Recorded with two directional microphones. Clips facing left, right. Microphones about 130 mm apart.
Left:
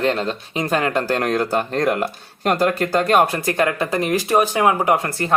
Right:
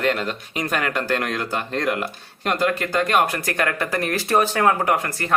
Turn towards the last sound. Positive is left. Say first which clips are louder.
# left 3 dB
turn(degrees=25)  # may be behind; listen again after turning